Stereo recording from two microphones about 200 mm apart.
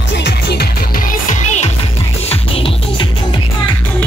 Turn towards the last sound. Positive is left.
turn(degrees=30)  # may be behind; listen again after turning